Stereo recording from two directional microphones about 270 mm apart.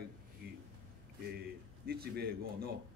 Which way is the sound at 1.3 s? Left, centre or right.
Right.